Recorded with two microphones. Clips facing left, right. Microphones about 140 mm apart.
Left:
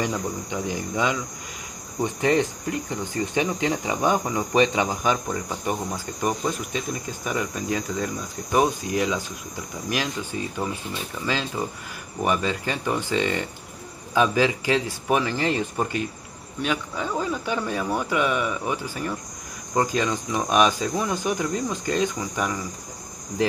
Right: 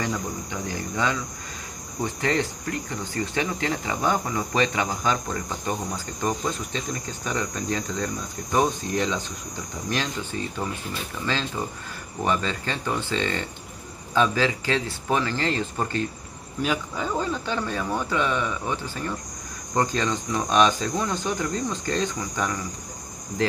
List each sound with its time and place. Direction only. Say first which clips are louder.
0.0 s speech: left 2 dB; 20° left (ahead or behind)
11.2 s speech: left 1 dB; 10° left (ahead or behind)
16.6 s speech: even; centre (ahead or behind)